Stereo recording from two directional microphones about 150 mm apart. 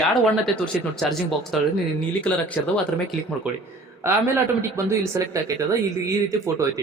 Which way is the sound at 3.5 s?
10° right (ahead or behind).